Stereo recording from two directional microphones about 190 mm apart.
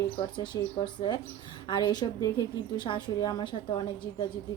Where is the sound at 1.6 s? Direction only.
25° left (ahead or behind).